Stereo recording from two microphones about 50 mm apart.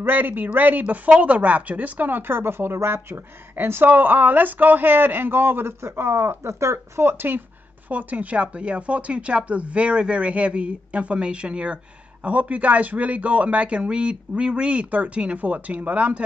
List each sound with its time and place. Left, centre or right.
0.0 s a man's voice: right
3.9 s a man's voice: right
5.9 s speech: right
7.0 s speech: right
7.9 s speech: right
15.3 s speech: right